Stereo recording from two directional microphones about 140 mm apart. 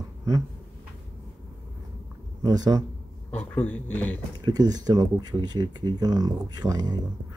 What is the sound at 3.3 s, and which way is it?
Speech, 10° left (ahead or behind).